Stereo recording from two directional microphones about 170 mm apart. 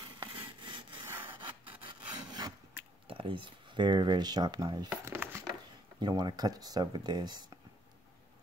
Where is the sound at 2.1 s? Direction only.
25° right (ahead or behind).